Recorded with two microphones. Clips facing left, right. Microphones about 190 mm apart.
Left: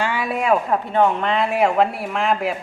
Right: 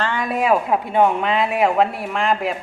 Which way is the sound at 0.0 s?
5° left (ahead or behind).